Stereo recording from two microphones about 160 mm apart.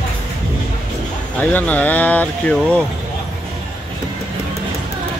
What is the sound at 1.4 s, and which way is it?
Speech, 10° left (ahead or behind).